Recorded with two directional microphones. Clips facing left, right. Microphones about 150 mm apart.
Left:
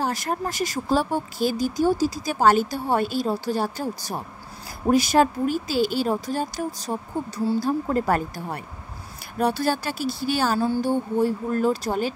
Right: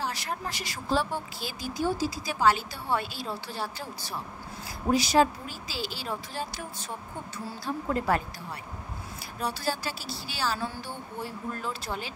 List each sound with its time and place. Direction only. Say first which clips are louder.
0.0 s speech: left 7 dB; 45° left (ahead or behind)
9.4 s speech: left 9 dB; 55° left (ahead or behind)